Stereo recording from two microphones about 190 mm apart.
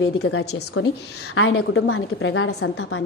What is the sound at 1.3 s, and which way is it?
A woman's voice, 90° left.